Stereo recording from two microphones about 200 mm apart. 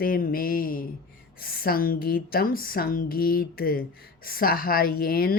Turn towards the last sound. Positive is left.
turn(degrees=50)  # may be behind; listen again after turning